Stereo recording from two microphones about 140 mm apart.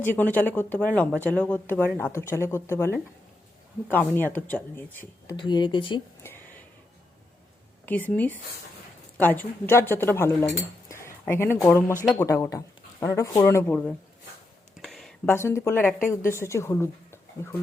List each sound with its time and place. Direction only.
0.0 s speech: 15° left (ahead or behind)
5.3 s speech: 30° left (ahead or behind)
7.9 s speech: 10° left (ahead or behind)
14.8 s a sound: centre (ahead or behind)
15.3 s speech: 20° left (ahead or behind)